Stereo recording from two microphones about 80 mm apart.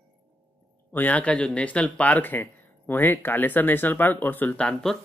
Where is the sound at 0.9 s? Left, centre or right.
Left.